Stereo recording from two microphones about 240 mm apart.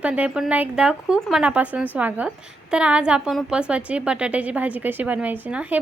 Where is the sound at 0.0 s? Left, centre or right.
Centre.